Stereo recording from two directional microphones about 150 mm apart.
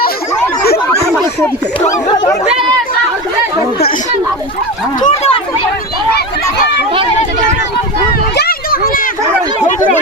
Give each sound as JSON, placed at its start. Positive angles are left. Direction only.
{"t": 1.9, "sound": "speech", "side_deg": 20}
{"t": 4.9, "sound": "speech", "side_deg": 55}
{"t": 8.4, "sound": "a sound", "side_deg": 90}